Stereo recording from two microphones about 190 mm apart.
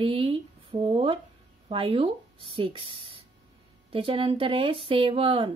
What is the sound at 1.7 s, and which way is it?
Speech, 30° right (ahead or behind).